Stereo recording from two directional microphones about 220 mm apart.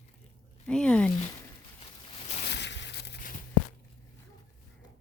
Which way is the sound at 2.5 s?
50° left (ahead or behind).